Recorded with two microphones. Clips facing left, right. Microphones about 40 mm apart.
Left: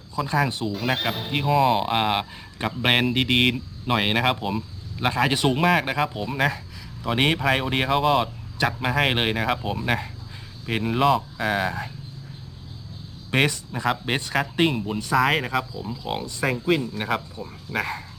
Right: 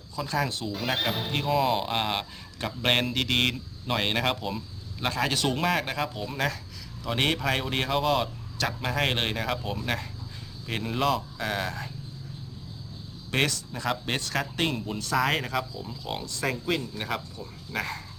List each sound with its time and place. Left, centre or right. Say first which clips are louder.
0.2 s speech: left 5 dB; centre
0.7 s a man's voice: left 3 dB; centre
13.3 s a man's voice: left 5 dB; centre